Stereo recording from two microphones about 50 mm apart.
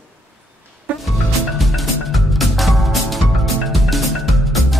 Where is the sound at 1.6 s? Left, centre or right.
Centre.